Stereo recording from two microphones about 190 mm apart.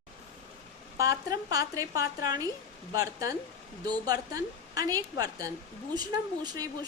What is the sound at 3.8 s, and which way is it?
A woman's voice, 20° right (ahead or behind).